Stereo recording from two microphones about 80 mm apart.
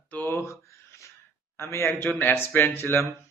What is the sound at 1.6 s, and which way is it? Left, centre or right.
A man's voice, left.